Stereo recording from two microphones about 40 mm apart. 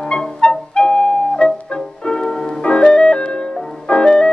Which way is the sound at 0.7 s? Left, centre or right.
Left.